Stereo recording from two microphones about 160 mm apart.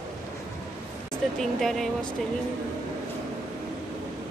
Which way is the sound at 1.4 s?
Centre (ahead or behind).